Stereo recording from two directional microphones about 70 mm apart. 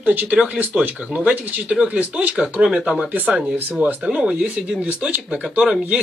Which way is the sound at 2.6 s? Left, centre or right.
Centre.